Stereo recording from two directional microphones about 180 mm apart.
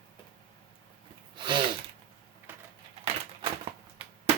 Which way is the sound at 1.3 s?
25° right (ahead or behind).